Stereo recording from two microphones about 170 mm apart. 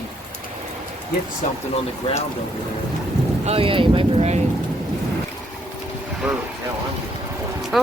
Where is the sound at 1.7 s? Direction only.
35° left (ahead or behind).